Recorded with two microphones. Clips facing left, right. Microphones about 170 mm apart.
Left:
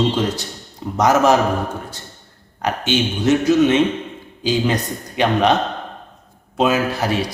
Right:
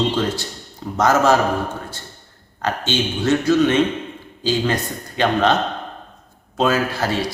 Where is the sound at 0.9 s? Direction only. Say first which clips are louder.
Left 1 dB; 15° left (ahead or behind).